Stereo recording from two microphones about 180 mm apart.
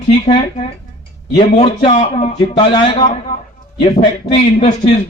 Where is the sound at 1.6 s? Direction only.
30° left (ahead or behind).